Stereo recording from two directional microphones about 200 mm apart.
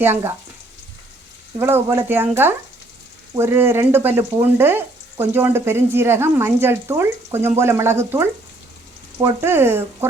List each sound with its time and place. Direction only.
0.0 s speech: 10° right (ahead or behind)
1.5 s speech: 10° right (ahead or behind)